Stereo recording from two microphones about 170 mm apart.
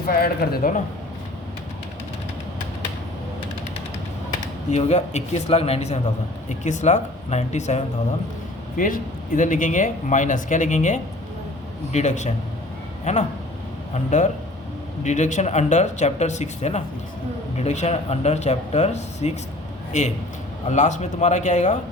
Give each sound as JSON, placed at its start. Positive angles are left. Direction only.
{"t": 0.1, "sound": "speech", "side_deg": 60}
{"t": 4.3, "sound": "a man's voice", "side_deg": 40}
{"t": 8.8, "sound": "a man's voice", "side_deg": 50}